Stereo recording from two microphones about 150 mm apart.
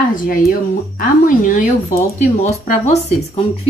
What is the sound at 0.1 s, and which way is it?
Speech, 65° left (ahead or behind).